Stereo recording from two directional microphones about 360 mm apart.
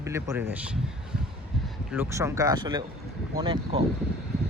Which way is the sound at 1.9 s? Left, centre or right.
Centre.